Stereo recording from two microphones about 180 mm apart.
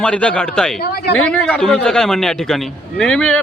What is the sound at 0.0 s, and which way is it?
Speech, 5° left (ahead or behind).